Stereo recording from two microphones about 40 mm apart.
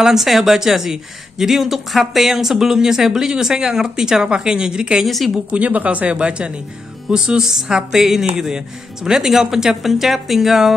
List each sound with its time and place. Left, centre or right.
0.0 s speech: centre
5.0 s a woman's voice: centre
5.5 s speech: right; by 10.7 s centre